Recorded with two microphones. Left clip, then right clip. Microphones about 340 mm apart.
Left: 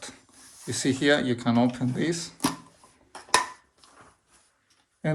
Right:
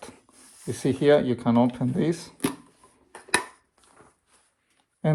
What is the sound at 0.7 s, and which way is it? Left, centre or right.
Speech, centre.